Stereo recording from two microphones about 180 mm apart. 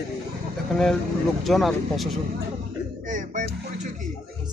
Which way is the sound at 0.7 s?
Centre (ahead or behind).